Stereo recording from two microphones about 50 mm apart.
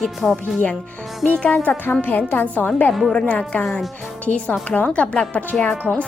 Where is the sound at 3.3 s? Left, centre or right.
Left.